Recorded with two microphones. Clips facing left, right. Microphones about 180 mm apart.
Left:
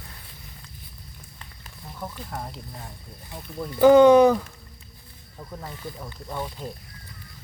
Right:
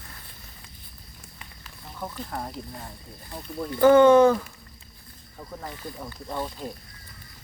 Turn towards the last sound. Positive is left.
turn(degrees=0)  # may be behind; listen again after turning